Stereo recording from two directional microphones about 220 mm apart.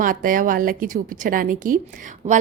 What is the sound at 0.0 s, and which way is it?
A woman's voice, 40° right (ahead or behind).